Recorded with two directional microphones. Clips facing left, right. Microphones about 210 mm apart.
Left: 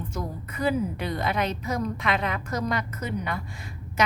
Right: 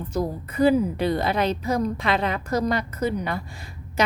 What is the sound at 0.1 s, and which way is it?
Speech, 35° right (ahead or behind).